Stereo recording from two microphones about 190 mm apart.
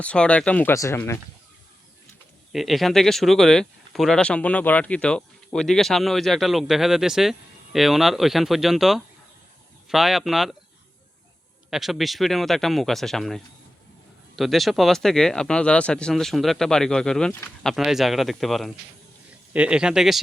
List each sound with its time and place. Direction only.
0.0 s speech: 5° left (ahead or behind)
2.5 s speech: centre (ahead or behind)
11.7 s speech: centre (ahead or behind)